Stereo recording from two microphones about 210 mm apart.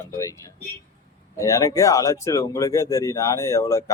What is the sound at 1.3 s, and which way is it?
Speech, 15° left (ahead or behind).